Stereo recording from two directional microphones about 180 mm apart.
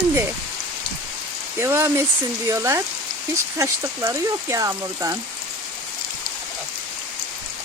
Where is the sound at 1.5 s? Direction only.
15° right (ahead or behind).